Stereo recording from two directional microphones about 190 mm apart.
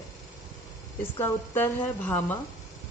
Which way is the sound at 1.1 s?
15° left (ahead or behind).